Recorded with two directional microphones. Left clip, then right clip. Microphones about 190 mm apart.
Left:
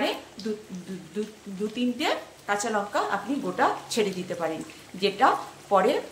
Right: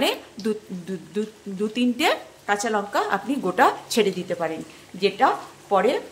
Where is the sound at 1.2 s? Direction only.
35° right (ahead or behind).